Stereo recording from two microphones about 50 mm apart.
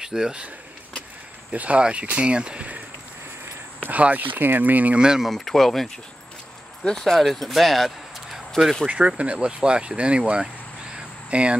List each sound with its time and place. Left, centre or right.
0.0 s speech: centre
1.5 s speech: right
3.8 s speech: right
4.9 s speech: centre
5.2 s speech: centre
8.8 s speech: right